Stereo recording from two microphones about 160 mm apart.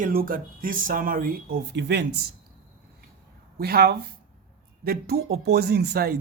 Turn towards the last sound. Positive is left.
turn(degrees=-75)  # may be behind; listen again after turning